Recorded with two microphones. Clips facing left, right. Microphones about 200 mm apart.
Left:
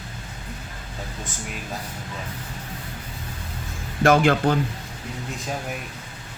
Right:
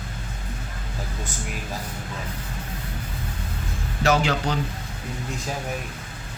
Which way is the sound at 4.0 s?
55° left (ahead or behind).